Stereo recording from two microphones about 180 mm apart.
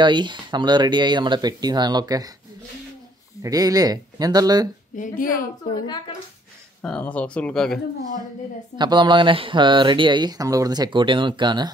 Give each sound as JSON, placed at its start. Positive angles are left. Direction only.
{"t": 0.0, "sound": "speech", "side_deg": -25}
{"t": 3.4, "sound": "speech", "side_deg": -20}
{"t": 4.9, "sound": "a woman's voice", "side_deg": 45}
{"t": 6.8, "sound": "speech", "side_deg": 5}
{"t": 8.7, "sound": "speech", "side_deg": -25}